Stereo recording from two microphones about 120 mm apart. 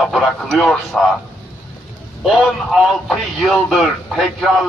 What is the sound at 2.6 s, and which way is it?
Speech, 5° right (ahead or behind).